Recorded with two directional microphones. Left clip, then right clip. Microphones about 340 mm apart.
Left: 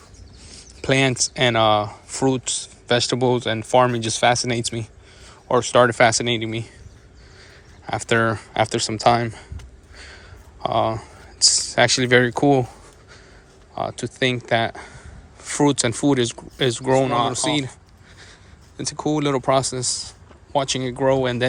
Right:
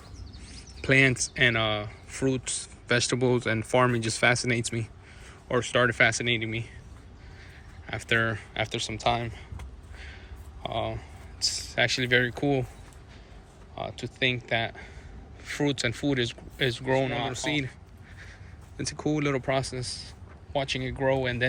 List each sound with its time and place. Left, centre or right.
0.4 s speech: centre
7.9 s speech: centre
10.6 s speech: centre
13.7 s speech: left
18.8 s speech: centre